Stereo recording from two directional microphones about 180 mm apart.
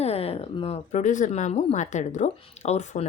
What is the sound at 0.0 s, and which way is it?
Speech, 35° left (ahead or behind).